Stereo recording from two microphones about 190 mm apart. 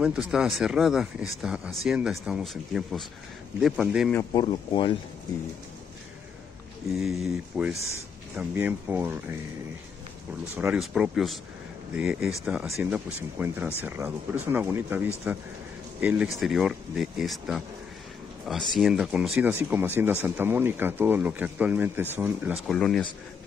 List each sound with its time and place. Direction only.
0.0 s speech: 5° right (ahead or behind)
4.3 s speech: 25° left (ahead or behind)
6.9 s speech: centre (ahead or behind)
10.5 s speech: 5° right (ahead or behind)
22.7 s speech: 5° left (ahead or behind)